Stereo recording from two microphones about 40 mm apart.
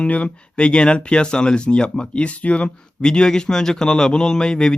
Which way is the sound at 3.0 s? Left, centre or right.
Centre.